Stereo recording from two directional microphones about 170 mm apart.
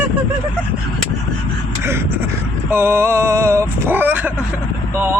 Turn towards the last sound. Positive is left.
turn(degrees=-10)  # may be behind; listen again after turning